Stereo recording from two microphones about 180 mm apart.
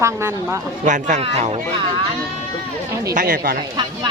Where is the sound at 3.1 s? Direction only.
50° right (ahead or behind).